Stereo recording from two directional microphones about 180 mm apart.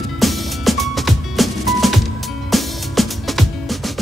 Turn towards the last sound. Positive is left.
turn(degrees=0)  # may be behind; listen again after turning